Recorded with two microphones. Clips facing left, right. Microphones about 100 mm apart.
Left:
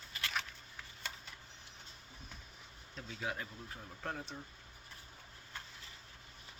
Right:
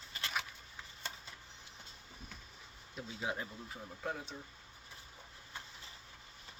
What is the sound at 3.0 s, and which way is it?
Speech, 20° right (ahead or behind).